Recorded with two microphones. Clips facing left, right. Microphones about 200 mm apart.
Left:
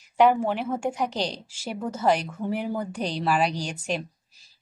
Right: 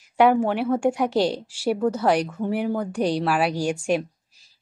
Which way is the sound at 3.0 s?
40° right (ahead or behind).